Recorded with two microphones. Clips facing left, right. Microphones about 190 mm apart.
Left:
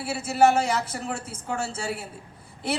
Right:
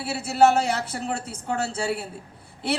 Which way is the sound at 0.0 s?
65° right (ahead or behind).